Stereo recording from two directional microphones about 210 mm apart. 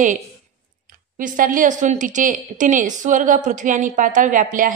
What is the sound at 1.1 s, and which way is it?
A woman's voice, 40° right (ahead or behind).